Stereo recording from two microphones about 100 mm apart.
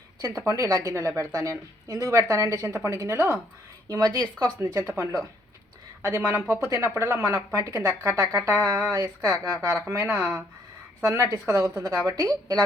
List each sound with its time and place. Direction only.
0.2 s a woman's voice: 35° right (ahead or behind)
3.8 s a woman's voice: 40° right (ahead or behind)
4.5 s speech: 20° right (ahead or behind)
8.2 s a woman's voice: 35° right (ahead or behind)
9.7 s speech: 25° right (ahead or behind)
11.4 s speech: 25° right (ahead or behind)
11.8 s a woman's voice: 35° right (ahead or behind)